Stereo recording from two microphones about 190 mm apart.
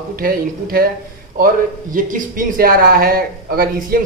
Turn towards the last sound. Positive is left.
turn(degrees=-50)  # may be behind; listen again after turning